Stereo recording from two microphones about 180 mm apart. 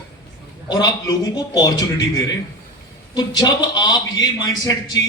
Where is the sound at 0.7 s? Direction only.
20° left (ahead or behind).